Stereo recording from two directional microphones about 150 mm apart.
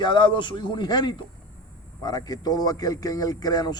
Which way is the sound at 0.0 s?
30° left (ahead or behind).